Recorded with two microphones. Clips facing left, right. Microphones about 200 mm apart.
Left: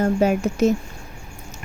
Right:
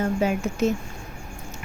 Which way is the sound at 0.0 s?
40° left (ahead or behind).